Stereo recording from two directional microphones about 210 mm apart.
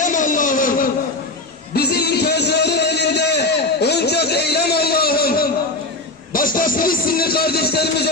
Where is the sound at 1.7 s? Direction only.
50° left (ahead or behind).